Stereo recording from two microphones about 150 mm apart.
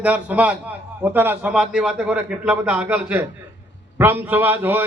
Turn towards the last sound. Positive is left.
turn(degrees=-15)  # may be behind; listen again after turning